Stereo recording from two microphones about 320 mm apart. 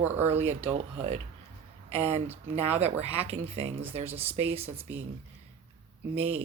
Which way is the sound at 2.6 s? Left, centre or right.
Centre.